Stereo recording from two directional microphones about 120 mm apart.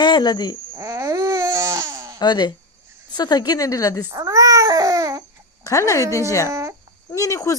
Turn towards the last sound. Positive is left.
turn(degrees=25)  # may be behind; listen again after turning